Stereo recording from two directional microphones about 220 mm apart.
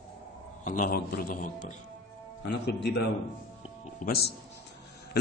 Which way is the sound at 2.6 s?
50° left (ahead or behind).